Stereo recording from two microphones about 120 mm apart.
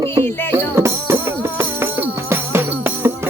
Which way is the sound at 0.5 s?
20° right (ahead or behind).